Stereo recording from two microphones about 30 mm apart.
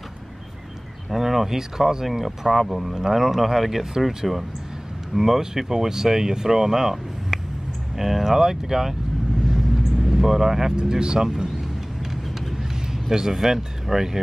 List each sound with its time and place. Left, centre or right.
1.1 s speech: centre
2.0 s speech: centre
2.9 s speech: centre
10.1 s speech: centre
10.8 s speech: right
11.2 s a sound: right
12.0 s vehicle: centre
13.1 s speech: centre